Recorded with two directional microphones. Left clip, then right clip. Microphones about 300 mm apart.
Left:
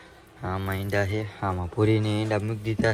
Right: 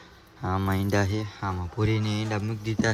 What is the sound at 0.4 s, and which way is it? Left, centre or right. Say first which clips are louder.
Speech: right 2 dB; centre.